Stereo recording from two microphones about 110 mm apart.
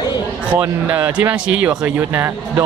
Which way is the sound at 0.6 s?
15° right (ahead or behind).